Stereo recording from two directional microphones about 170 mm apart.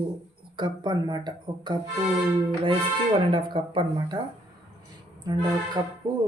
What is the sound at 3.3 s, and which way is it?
Speech, 30° right (ahead or behind).